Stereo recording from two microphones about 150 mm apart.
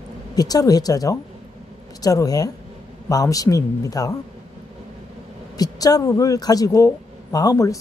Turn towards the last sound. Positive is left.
turn(degrees=20)  # may be behind; listen again after turning